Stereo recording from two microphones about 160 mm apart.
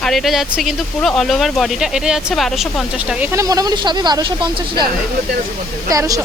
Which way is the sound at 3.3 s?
20° right (ahead or behind).